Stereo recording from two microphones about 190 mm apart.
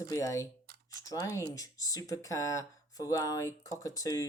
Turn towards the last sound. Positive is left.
turn(degrees=15)  # may be behind; listen again after turning